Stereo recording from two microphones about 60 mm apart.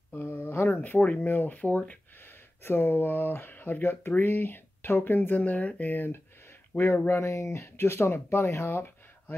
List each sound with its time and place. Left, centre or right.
0.2 s a sound: left
0.7 s speech: left
2.6 s speech: left
5.4 s speech: left
7.2 s speech: left
7.6 s speech: left